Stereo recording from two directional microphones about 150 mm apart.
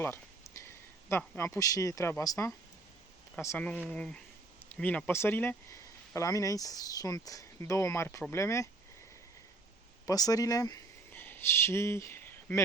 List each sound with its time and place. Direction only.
0.0 s speech: 15° left (ahead or behind)
3.8 s speech: 5° left (ahead or behind)
10.1 s speech: 25° left (ahead or behind)